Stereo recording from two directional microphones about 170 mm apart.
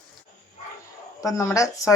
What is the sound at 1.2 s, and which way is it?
Speech, 20° left (ahead or behind).